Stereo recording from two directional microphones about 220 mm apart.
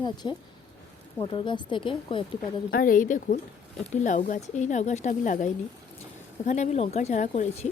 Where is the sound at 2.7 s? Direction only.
40° left (ahead or behind).